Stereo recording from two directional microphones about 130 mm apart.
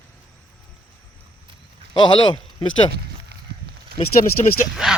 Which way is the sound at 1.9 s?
35° left (ahead or behind).